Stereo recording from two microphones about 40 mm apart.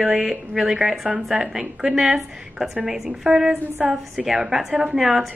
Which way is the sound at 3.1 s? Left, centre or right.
Right.